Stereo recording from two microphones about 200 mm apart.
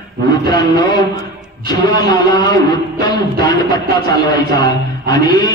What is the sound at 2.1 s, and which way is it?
Music, 20° left (ahead or behind).